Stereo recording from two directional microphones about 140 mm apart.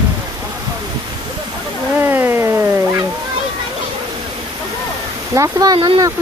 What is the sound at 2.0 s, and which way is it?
Cat, 15° right (ahead or behind).